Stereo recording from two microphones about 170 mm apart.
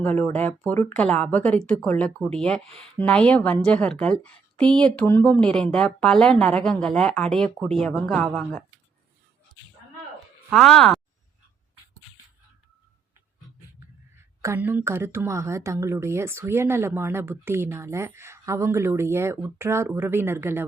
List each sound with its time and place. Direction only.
0.0 s speech: 10° left (ahead or behind)
10.5 s speech: centre (ahead or behind)
14.4 s speech: 15° right (ahead or behind)